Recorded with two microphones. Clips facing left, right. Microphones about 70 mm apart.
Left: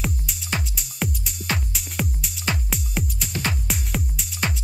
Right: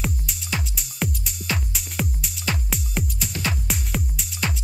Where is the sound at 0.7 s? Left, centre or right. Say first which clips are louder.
Even; centre.